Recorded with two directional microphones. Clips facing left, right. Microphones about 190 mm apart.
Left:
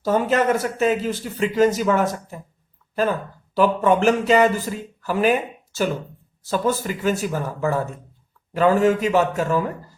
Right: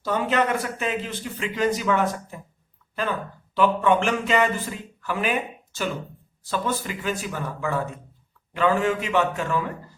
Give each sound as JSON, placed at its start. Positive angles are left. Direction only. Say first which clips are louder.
{"t": 0.0, "sound": "speech", "louder": "left 4 dB", "side_deg": 40}
{"t": 6.4, "sound": "speech", "louder": "left 5 dB", "side_deg": 40}